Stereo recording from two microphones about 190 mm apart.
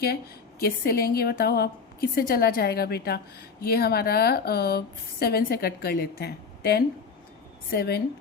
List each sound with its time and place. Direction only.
0.6 s a woman's voice: 55° left (ahead or behind)